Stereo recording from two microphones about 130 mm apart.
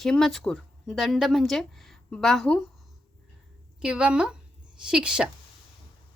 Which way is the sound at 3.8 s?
5° right (ahead or behind).